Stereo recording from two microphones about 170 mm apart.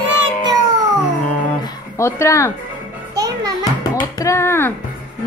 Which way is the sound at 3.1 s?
20° right (ahead or behind).